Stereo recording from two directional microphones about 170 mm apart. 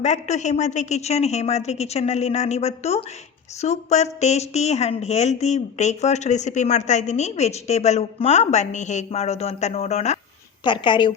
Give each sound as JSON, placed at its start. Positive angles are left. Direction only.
{"t": 0.0, "sound": "speech", "side_deg": 40}
{"t": 10.6, "sound": "a woman's voice", "side_deg": 30}